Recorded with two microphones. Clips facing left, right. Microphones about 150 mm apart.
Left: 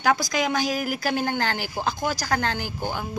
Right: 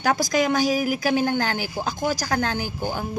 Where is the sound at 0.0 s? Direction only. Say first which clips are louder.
Right 2 dB; 50° right (ahead or behind).